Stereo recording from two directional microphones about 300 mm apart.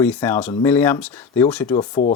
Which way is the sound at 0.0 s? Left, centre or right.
Centre.